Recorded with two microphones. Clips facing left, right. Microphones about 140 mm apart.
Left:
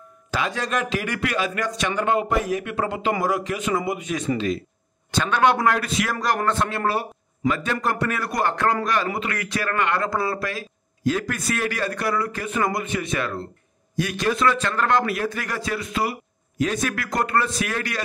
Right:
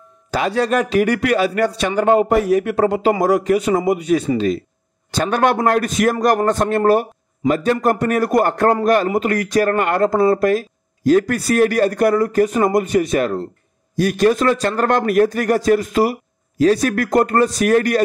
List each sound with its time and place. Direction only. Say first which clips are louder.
0.3 s a man's voice: right 8 dB; 35° right (ahead or behind)
14.9 s a man's voice: right 9 dB; 50° right (ahead or behind)